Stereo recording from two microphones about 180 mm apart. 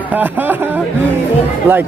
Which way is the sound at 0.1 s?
10° right (ahead or behind).